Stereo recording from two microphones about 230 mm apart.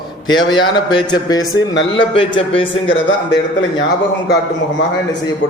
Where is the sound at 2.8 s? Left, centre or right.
Left.